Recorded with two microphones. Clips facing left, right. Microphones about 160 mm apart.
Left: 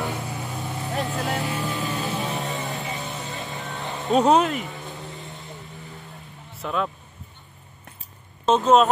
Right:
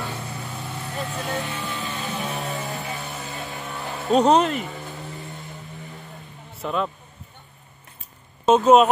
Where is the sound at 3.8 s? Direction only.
Centre (ahead or behind).